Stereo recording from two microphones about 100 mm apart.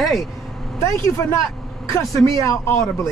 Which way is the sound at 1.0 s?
30° left (ahead or behind).